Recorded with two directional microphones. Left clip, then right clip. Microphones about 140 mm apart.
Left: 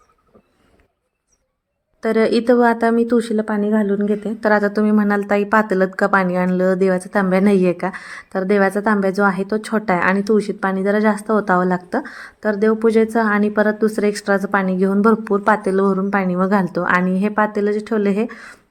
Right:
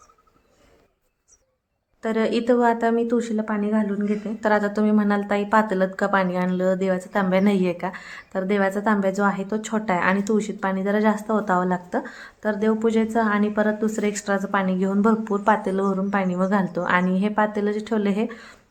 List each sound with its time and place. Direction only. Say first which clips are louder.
2.0 s a woman's voice: left 7 dB; 35° left (ahead or behind)
4.4 s a woman's voice: left 4 dB; 30° left (ahead or behind)